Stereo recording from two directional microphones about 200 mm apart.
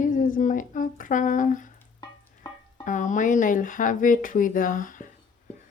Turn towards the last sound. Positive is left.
turn(degrees=40)  # may be behind; listen again after turning